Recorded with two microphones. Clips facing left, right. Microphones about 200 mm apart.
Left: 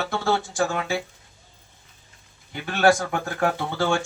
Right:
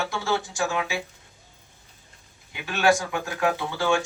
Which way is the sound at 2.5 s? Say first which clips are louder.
Left 2 dB; 55° left (ahead or behind).